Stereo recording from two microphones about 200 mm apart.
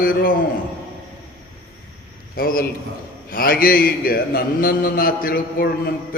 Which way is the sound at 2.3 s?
45° left (ahead or behind).